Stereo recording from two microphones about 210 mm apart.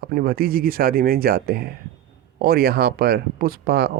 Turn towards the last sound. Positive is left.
turn(degrees=-50)  # may be behind; listen again after turning